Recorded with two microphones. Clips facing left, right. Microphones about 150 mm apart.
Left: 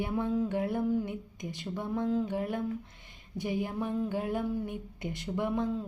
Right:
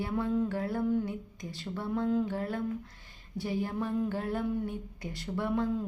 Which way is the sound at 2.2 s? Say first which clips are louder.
Left 1 dB; 15° left (ahead or behind).